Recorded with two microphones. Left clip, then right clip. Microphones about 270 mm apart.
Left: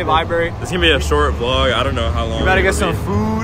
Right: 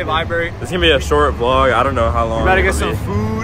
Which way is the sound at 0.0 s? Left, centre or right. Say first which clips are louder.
Left 2 dB; left.